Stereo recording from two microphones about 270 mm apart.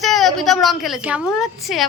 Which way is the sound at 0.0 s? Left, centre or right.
Centre.